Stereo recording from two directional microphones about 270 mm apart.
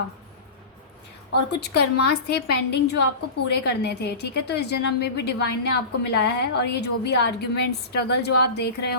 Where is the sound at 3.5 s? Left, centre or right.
Left.